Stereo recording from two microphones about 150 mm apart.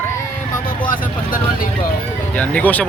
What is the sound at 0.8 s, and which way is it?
Speech, 70° left (ahead or behind).